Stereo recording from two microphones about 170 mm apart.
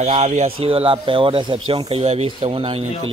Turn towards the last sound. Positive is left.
turn(degrees=-35)  # may be behind; listen again after turning